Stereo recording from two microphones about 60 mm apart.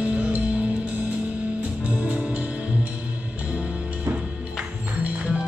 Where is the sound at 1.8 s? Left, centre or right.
Centre.